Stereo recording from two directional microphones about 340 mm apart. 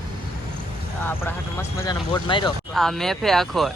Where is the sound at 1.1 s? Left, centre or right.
Centre.